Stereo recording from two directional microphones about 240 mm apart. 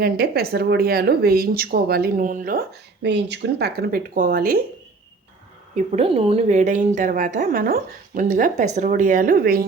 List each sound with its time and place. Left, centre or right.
0.0 s speech: right
5.7 s speech: right